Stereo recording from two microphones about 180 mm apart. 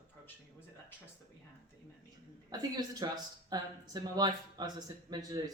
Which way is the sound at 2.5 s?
20° right (ahead or behind).